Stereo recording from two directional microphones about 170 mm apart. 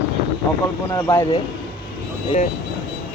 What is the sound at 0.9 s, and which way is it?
Speech, 20° left (ahead or behind).